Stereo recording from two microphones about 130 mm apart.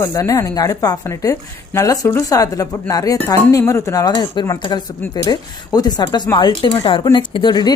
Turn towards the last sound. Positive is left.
turn(degrees=35)  # may be behind; listen again after turning